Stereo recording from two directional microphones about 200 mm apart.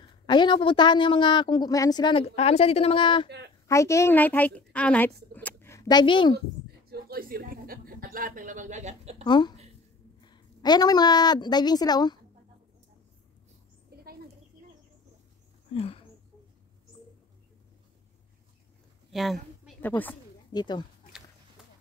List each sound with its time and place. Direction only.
0.3 s a woman's voice: 25° left (ahead or behind)
3.3 s a woman's voice: 55° right (ahead or behind)
3.6 s a woman's voice: 15° left (ahead or behind)
6.9 s a woman's voice: 50° right (ahead or behind)
9.2 s a woman's voice: 20° left (ahead or behind)
13.9 s a sound: 50° right (ahead or behind)
15.7 s speech: 30° left (ahead or behind)
19.1 s a sound: centre (ahead or behind)
20.5 s a woman's voice: 20° left (ahead or behind)